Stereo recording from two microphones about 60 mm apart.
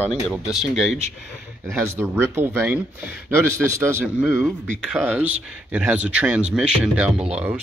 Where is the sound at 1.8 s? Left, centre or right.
Right.